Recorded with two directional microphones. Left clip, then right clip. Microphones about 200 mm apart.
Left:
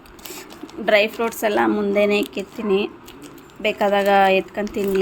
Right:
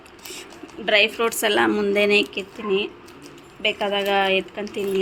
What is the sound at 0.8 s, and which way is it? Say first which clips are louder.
Speech: left 1 dB; 15° left (ahead or behind).